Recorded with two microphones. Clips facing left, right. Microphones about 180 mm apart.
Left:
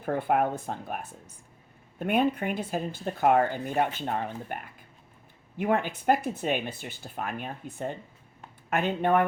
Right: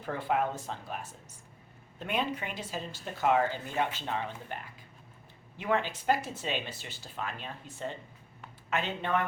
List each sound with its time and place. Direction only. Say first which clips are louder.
0.0 s speech: left 5 dB; 55° left (ahead or behind)